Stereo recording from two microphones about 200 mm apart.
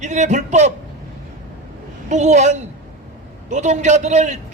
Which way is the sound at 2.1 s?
35° right (ahead or behind).